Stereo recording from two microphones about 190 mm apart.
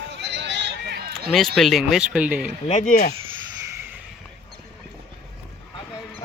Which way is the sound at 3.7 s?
15° right (ahead or behind).